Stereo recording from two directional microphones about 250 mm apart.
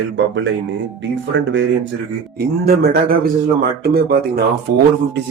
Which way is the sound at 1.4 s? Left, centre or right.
Right.